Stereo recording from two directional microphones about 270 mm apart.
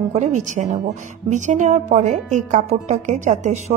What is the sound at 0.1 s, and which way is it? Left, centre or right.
A woman's voice, right.